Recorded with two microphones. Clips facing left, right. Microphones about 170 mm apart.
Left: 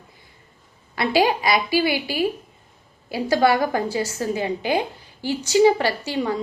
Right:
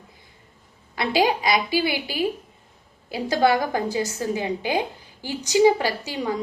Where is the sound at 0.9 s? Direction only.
20° right (ahead or behind).